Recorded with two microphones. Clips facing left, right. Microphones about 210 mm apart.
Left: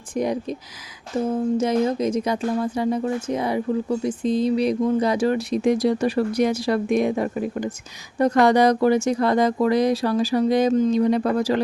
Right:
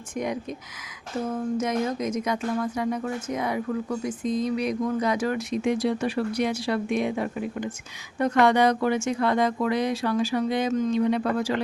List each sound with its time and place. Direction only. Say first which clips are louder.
1.5 s speech: left 5 dB; 30° left (ahead or behind)